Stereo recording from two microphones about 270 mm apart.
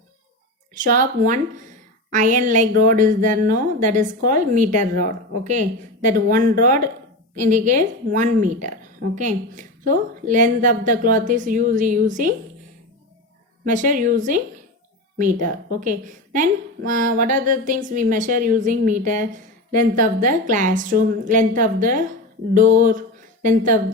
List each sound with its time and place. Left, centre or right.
0.7 s a woman's voice: right
13.7 s a woman's voice: right
22.5 s a sound: right